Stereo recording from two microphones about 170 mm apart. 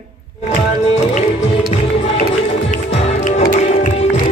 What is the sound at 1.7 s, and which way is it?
Music, 30° left (ahead or behind).